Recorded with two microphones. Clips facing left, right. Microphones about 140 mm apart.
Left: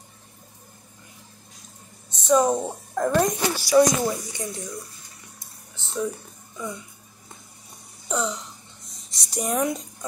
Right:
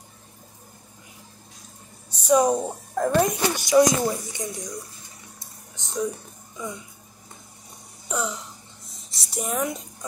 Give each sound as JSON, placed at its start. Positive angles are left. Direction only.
{"t": 2.2, "sound": "speech", "side_deg": -10}
{"t": 5.8, "sound": "music", "side_deg": -15}
{"t": 8.1, "sound": "throat clearing", "side_deg": -5}
{"t": 9.1, "sound": "speech", "side_deg": 0}